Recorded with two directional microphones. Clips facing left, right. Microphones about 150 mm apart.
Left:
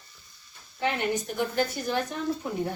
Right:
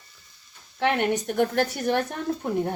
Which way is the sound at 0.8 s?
75° right (ahead or behind).